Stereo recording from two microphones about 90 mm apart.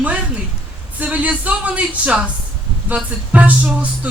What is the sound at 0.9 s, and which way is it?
Speech, 15° right (ahead or behind).